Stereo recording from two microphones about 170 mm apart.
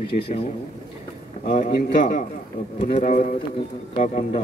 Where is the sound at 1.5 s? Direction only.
45° left (ahead or behind).